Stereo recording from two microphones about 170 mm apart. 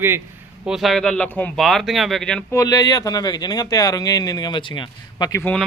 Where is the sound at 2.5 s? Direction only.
20° left (ahead or behind).